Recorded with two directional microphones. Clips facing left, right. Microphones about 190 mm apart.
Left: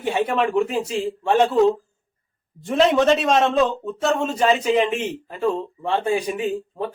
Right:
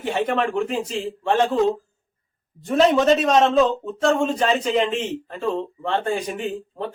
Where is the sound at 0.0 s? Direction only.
5° left (ahead or behind).